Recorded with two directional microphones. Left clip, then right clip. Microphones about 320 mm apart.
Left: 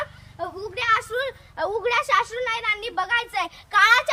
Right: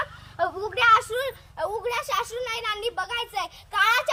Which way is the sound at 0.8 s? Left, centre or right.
Centre.